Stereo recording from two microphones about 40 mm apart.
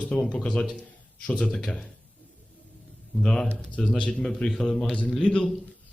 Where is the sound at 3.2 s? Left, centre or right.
Centre.